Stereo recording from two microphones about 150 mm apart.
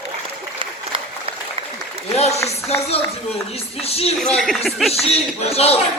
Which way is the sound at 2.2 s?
45° left (ahead or behind).